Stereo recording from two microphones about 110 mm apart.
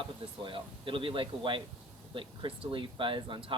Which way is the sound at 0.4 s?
50° right (ahead or behind).